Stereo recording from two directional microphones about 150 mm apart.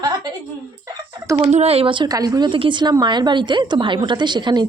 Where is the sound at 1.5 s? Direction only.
45° right (ahead or behind).